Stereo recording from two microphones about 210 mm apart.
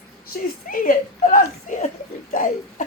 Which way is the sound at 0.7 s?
40° left (ahead or behind).